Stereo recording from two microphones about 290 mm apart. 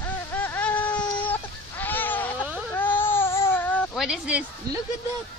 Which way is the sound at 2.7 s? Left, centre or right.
Centre.